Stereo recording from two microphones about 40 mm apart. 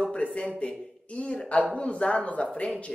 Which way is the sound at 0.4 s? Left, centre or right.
Left.